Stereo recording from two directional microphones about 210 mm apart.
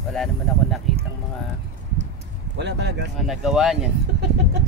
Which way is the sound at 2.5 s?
55° right (ahead or behind).